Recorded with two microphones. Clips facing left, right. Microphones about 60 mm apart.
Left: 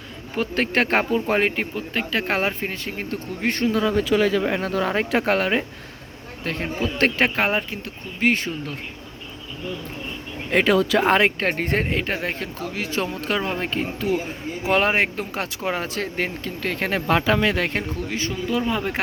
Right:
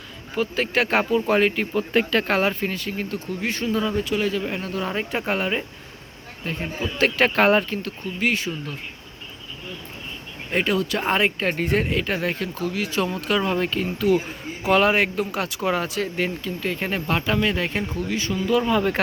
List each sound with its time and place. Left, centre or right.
0.3 s speech: left
1.7 s speech: centre
2.2 s speech: left
4.4 s speech: left
7.3 s speech: centre
8.2 s speech: left
10.5 s speech: left
11.0 s speech: left
16.0 s speech: left
18.1 s speech: left
18.6 s speech: centre